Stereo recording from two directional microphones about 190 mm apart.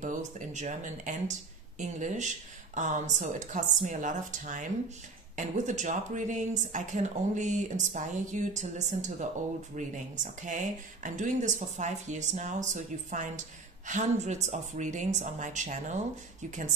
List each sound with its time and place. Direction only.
0.0 s speech: 40° right (ahead or behind)